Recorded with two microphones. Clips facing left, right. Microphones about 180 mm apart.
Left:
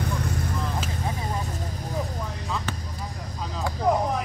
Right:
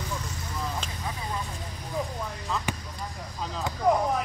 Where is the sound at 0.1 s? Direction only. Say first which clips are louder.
Left 7 dB; 55° left (ahead or behind).